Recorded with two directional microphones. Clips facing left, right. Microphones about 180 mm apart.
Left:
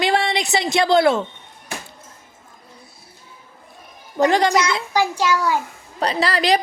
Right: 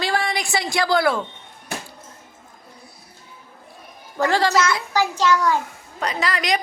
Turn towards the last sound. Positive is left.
turn(degrees=35)  # may be behind; listen again after turning